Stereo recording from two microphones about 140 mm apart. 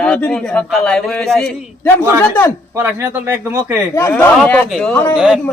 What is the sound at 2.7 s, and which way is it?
Speech, 15° right (ahead or behind).